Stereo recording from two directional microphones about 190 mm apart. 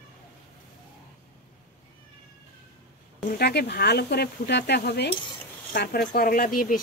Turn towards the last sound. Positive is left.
turn(degrees=45)  # may be behind; listen again after turning